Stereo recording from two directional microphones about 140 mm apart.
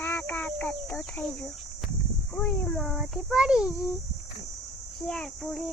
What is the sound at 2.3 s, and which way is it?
A child's voice, 5° left (ahead or behind).